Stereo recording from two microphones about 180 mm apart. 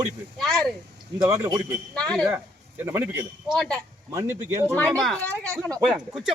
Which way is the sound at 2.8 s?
10° right (ahead or behind).